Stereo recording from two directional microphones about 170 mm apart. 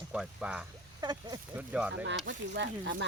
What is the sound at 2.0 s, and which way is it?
Speech, 90° right.